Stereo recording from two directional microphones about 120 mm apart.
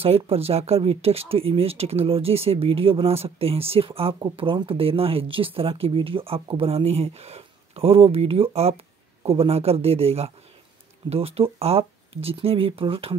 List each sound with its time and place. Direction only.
0.0 s speech: 55° right (ahead or behind)